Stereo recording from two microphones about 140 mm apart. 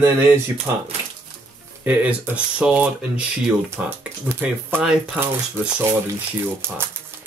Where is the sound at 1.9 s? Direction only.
10° right (ahead or behind).